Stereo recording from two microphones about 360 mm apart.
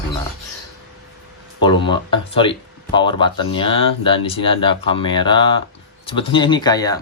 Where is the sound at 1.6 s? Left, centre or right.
Centre.